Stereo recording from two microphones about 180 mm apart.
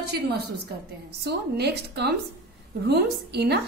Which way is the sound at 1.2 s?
65° right (ahead or behind).